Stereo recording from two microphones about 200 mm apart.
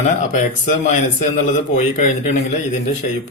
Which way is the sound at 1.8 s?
35° left (ahead or behind).